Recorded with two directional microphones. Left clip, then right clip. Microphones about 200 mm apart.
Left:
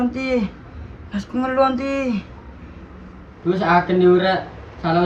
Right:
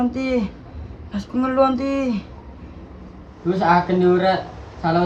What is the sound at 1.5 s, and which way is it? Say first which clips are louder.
Speech: even; 45° right (ahead or behind).